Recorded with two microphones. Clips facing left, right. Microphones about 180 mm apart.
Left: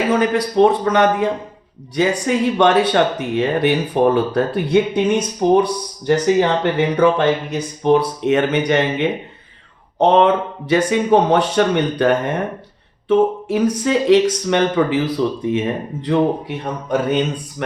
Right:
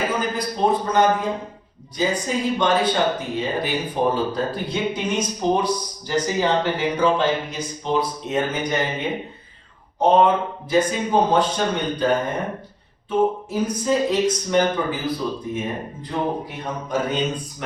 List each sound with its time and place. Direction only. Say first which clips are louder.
0.1 s speech: left 8 dB; 80° left
13.1 s speech: left 6 dB; 90° left